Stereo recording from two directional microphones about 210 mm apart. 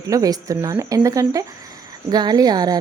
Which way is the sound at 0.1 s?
15° right (ahead or behind).